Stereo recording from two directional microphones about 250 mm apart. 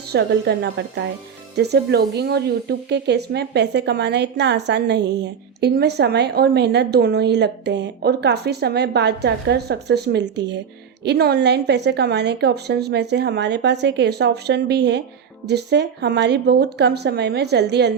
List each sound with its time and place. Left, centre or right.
0.1 s a woman's voice: right